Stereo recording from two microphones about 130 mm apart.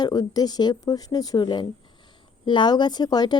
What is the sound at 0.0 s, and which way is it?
A woman's voice, 30° left (ahead or behind).